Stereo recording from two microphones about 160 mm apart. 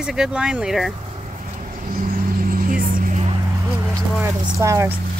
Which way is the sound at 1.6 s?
55° right (ahead or behind).